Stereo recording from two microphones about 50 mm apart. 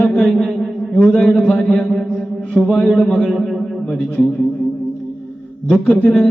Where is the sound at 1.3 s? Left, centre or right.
Centre.